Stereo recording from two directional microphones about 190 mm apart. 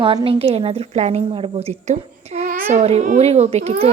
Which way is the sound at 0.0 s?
25° right (ahead or behind).